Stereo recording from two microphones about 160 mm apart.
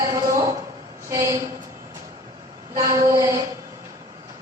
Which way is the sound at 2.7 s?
20° right (ahead or behind).